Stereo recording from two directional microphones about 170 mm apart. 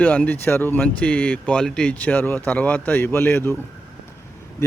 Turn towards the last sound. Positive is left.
turn(degrees=15)  # may be behind; listen again after turning